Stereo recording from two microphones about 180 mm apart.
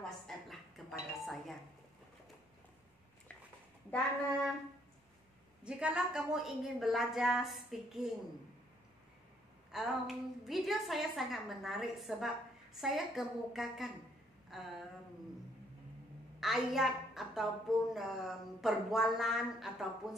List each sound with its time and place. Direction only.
0.5 s doorbell: centre (ahead or behind)
5.6 s a woman's voice: 5° right (ahead or behind)
9.7 s a woman's voice: centre (ahead or behind)
14.5 s a sound: centre (ahead or behind)
16.3 s a woman's voice: centre (ahead or behind)